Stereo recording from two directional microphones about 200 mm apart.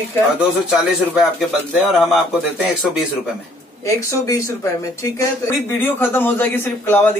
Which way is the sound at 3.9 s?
15° left (ahead or behind).